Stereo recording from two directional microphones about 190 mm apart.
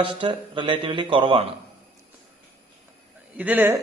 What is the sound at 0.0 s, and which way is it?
A man's voice, 25° right (ahead or behind).